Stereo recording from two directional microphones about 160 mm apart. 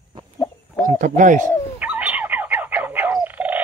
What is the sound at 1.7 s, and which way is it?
Frog, 10° right (ahead or behind).